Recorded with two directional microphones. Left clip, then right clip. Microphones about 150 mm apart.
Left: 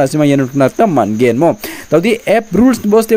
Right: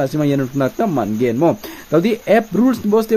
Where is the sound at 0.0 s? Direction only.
20° left (ahead or behind).